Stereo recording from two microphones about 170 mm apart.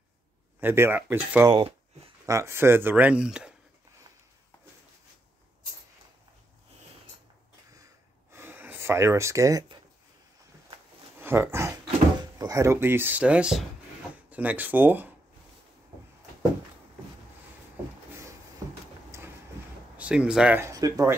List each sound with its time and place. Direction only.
0.6 s speech: 15° right (ahead or behind)
8.3 s gasp: 15° right (ahead or behind)
11.1 s speech: 10° right (ahead or behind)
19.1 s a sound: 15° right (ahead or behind)
20.0 s speech: 5° right (ahead or behind)
20.7 s speech: 20° right (ahead or behind)